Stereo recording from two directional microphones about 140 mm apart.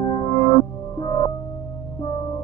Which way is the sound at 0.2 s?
25° left (ahead or behind).